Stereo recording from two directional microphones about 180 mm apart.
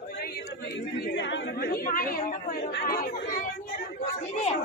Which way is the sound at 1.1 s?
80° left.